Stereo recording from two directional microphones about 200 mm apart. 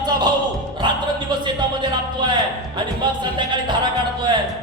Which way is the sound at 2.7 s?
25° right (ahead or behind).